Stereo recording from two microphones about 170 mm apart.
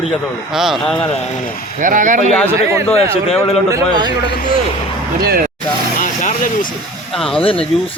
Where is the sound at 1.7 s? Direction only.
50° right (ahead or behind).